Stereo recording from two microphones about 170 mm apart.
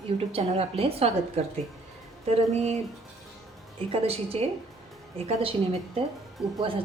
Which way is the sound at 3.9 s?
35° right (ahead or behind).